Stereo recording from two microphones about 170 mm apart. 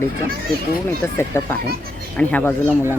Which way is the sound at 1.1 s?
15° left (ahead or behind).